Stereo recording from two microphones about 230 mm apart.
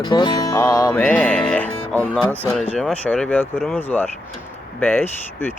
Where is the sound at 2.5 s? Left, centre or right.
Centre.